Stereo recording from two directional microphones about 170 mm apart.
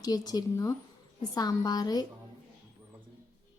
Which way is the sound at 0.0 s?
20° left (ahead or behind).